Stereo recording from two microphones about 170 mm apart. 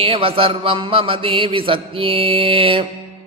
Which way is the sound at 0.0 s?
30° right (ahead or behind).